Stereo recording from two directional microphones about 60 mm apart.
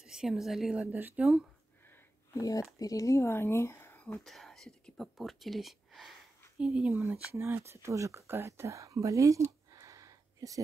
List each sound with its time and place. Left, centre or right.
0.0 s a woman's voice: centre
0.9 s speech: right
2.3 s speech: left
3.3 s speech: left
4.2 s speech: centre
5.1 s speech: centre
6.6 s speech: centre
7.0 s speech: right
8.3 s a sound: right